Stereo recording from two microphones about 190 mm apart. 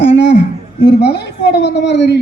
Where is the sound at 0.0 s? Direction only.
65° left (ahead or behind).